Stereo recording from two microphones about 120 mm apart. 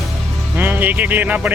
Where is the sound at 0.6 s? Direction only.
15° right (ahead or behind).